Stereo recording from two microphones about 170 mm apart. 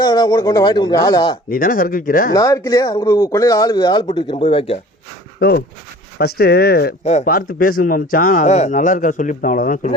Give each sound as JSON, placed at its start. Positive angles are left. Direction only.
{"t": 0.0, "sound": "speech", "side_deg": 25}
{"t": 1.5, "sound": "speech", "side_deg": 55}
{"t": 2.3, "sound": "speech", "side_deg": 20}
{"t": 5.4, "sound": "speech", "side_deg": 65}
{"t": 7.0, "sound": "speech", "side_deg": 40}
{"t": 7.3, "sound": "a man's voice", "side_deg": 60}